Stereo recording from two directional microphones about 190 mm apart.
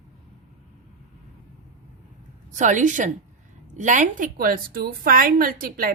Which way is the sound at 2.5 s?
40° right (ahead or behind).